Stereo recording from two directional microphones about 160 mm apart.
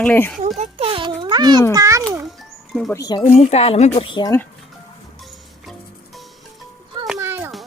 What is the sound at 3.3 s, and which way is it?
Speech, 40° left (ahead or behind).